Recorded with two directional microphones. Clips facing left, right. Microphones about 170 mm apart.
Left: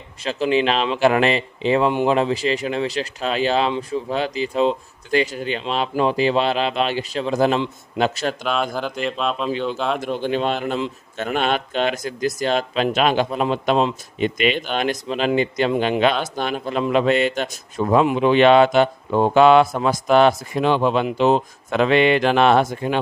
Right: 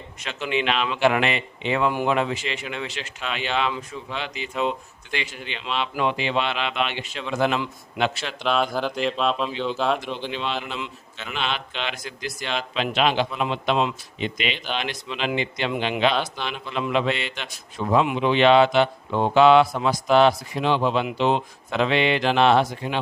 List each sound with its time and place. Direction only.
0.2 s speech: 35° left (ahead or behind)
1.9 s speech: 20° left (ahead or behind)
2.1 s speech: 35° left (ahead or behind)
8.7 s speech: centre (ahead or behind)
10.0 s a man's voice: 50° left (ahead or behind)